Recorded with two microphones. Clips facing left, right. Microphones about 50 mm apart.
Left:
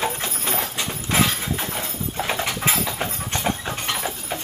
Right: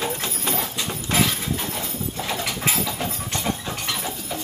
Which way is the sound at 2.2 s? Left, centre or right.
Left.